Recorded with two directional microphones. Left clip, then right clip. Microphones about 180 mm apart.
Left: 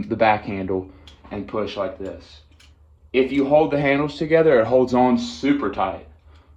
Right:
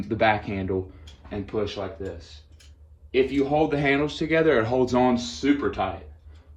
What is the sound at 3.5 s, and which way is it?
Speech, 50° left (ahead or behind).